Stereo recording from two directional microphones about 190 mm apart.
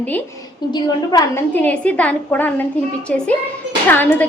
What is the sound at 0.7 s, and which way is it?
Speech, 20° left (ahead or behind).